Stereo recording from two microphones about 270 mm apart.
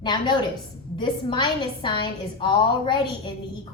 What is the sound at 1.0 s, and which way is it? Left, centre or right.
A woman's voice, centre.